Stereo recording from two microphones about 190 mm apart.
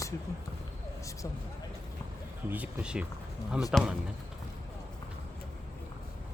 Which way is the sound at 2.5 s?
5° right (ahead or behind).